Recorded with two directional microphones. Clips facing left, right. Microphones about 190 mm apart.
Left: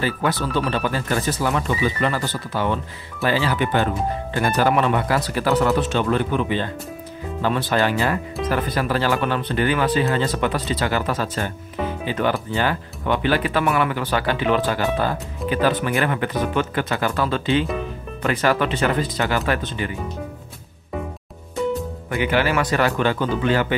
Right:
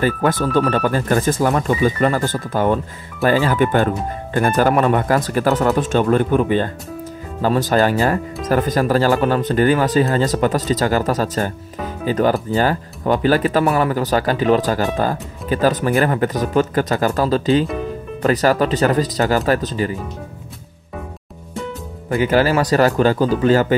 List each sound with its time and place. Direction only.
0.0 s speech: 50° right (ahead or behind)
22.1 s speech: 40° right (ahead or behind)